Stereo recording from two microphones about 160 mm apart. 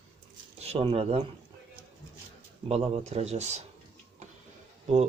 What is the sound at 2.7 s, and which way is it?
Speech, 40° right (ahead or behind).